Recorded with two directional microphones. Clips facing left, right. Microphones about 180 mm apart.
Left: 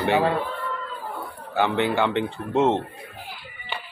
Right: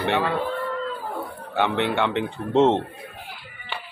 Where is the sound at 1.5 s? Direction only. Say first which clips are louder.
Left 1 dB; centre (ahead or behind).